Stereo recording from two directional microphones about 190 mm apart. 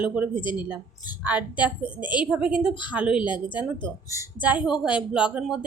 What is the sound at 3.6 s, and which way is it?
Speech, 20° left (ahead or behind).